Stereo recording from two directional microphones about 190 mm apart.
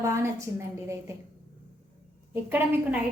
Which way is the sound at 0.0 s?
15° right (ahead or behind).